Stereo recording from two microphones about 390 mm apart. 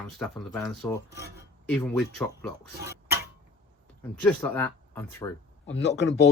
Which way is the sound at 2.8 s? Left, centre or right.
Right.